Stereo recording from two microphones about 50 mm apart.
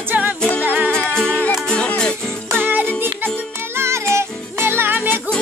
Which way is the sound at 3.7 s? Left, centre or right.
Right.